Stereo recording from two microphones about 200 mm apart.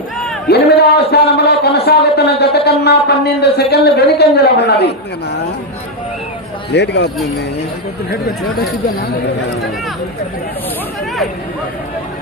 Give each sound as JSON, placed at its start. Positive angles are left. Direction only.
{"t": 0.4, "sound": "a sound", "side_deg": 55}
{"t": 2.4, "sound": "a man's voice", "side_deg": 55}
{"t": 6.7, "sound": "a man's voice", "side_deg": 60}